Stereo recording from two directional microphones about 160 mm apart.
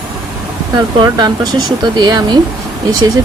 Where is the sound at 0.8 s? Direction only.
25° right (ahead or behind).